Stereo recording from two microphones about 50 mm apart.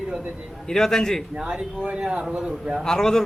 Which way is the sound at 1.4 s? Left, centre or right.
Centre.